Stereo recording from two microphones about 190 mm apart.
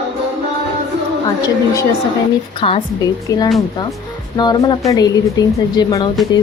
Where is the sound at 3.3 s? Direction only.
15° left (ahead or behind).